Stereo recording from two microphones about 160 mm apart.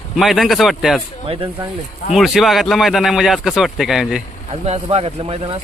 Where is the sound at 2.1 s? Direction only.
Centre (ahead or behind).